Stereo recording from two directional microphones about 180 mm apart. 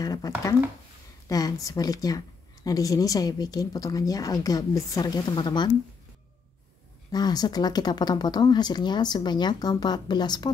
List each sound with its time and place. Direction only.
0.0 s speech: 20° left (ahead or behind)
1.3 s a woman's voice: 20° left (ahead or behind)
7.1 s a woman's voice: 20° left (ahead or behind)